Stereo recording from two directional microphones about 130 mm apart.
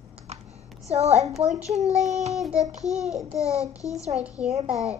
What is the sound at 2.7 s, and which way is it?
Speech, 60° right (ahead or behind).